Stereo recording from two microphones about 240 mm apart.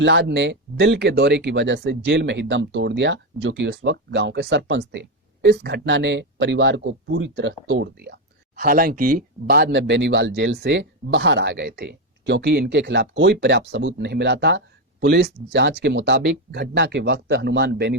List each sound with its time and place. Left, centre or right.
0.0 s speech: right